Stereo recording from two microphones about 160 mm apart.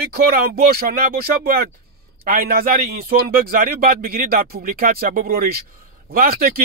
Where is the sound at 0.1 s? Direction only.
70° right (ahead or behind).